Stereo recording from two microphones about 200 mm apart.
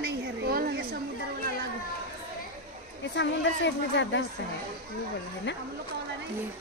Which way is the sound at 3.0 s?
65° left (ahead or behind).